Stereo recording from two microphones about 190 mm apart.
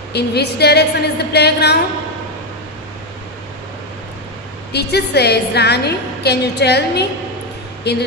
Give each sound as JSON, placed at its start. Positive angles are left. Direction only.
{"t": 0.1, "sound": "a woman's voice", "side_deg": 60}
{"t": 4.7, "sound": "a woman's voice", "side_deg": 60}